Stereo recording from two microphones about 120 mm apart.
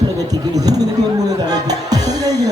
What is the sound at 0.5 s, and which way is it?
Speech, 30° right (ahead or behind).